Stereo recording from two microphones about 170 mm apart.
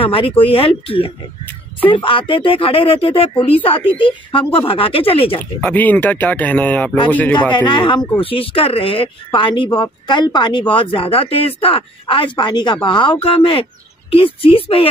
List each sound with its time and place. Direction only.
0.0 s speech: 30° left (ahead or behind)
5.4 s speech: 10° left (ahead or behind)
7.6 s speech: 30° left (ahead or behind)